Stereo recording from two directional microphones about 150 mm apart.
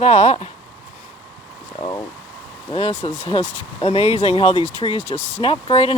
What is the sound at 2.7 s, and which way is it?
Speech, 40° left (ahead or behind).